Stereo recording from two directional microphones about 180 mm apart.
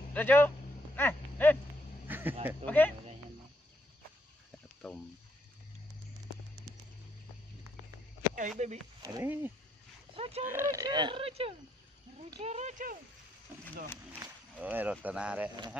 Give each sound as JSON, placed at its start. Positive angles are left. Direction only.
{"t": 0.1, "sound": "speech", "side_deg": 10}
{"t": 0.9, "sound": "a sound", "side_deg": 10}
{"t": 2.0, "sound": "a sound", "side_deg": -10}
{"t": 2.6, "sound": "speech", "side_deg": 10}
{"t": 4.8, "sound": "speech", "side_deg": 5}
{"t": 8.4, "sound": "speech", "side_deg": -40}
{"t": 9.0, "sound": "speech", "side_deg": -15}
{"t": 10.1, "sound": "speech", "side_deg": -30}
{"t": 10.4, "sound": "speech", "side_deg": -15}
{"t": 14.6, "sound": "speech", "side_deg": -10}